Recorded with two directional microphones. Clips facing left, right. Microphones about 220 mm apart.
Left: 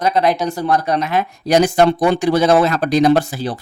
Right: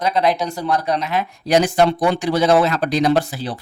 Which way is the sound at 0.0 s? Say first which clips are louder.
Left 2 dB; 50° left (ahead or behind).